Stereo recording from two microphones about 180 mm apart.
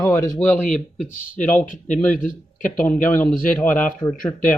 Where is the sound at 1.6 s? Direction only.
45° left (ahead or behind).